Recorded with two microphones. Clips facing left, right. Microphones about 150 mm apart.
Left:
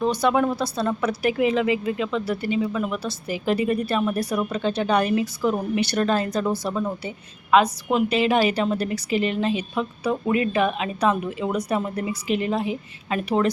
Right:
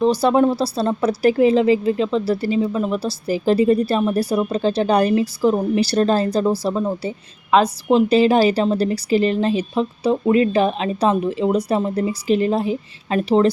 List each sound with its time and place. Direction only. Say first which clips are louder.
0.0 s speech: right 5 dB; 30° right (ahead or behind)